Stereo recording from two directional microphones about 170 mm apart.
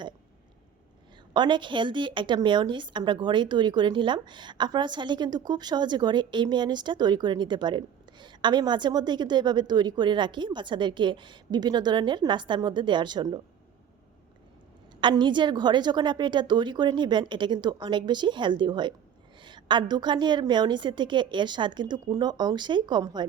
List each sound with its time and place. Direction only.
1.3 s a woman's voice: 25° right (ahead or behind)
15.0 s a woman's voice: 25° right (ahead or behind)